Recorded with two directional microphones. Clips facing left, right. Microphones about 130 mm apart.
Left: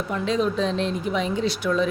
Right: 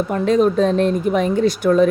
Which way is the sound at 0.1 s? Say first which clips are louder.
Right 7 dB; 50° right (ahead or behind).